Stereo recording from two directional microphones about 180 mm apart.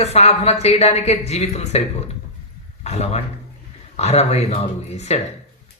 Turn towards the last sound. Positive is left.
turn(degrees=35)  # may be behind; listen again after turning